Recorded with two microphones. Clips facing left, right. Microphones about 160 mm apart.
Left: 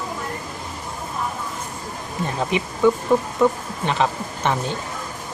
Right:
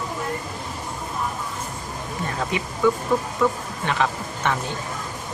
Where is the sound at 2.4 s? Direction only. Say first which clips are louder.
Left 3 dB; 20° left (ahead or behind).